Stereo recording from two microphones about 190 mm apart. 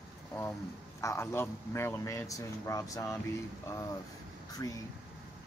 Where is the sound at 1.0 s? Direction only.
15° left (ahead or behind).